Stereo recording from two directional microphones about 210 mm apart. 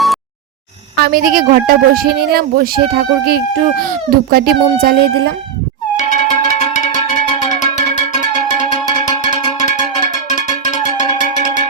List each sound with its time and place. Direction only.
0.9 s speech: 45° right (ahead or behind)
6.0 s cat: 35° left (ahead or behind)
10.7 s music: 35° left (ahead or behind)